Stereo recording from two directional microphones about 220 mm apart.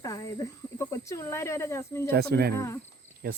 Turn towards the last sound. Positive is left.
turn(degrees=-45)  # may be behind; listen again after turning